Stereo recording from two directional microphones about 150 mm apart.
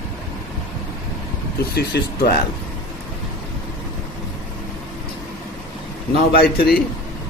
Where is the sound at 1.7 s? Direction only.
90° left.